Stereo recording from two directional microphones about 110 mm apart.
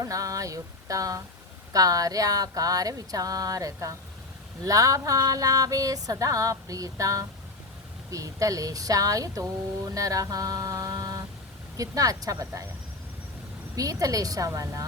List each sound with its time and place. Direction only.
0.0 s a sound: 30° right (ahead or behind)
1.7 s speech: 35° right (ahead or behind)
13.7 s speech: 30° right (ahead or behind)